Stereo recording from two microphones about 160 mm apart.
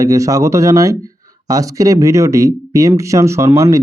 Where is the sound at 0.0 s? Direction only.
20° right (ahead or behind).